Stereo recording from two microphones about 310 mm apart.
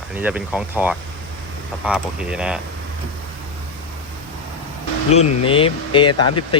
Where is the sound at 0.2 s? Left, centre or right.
Centre.